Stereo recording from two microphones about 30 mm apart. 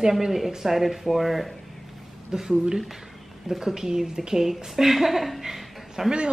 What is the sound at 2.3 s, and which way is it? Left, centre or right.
A woman's voice, centre.